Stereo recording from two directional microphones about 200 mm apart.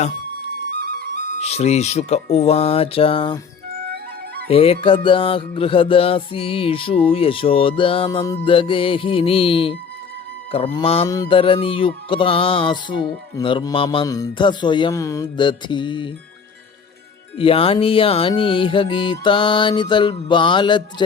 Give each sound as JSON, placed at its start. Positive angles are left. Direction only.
{"t": 0.8, "sound": "music", "side_deg": -50}
{"t": 1.4, "sound": "speech", "side_deg": 30}
{"t": 2.3, "sound": "music", "side_deg": 30}
{"t": 4.4, "sound": "music", "side_deg": 30}
{"t": 17.3, "sound": "music", "side_deg": 30}